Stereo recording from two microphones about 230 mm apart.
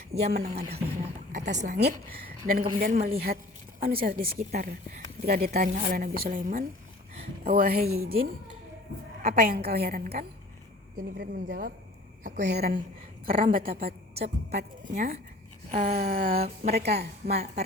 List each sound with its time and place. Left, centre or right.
0.1 s a woman's voice: right
9.2 s a woman's voice: right
16.0 s a woman's voice: right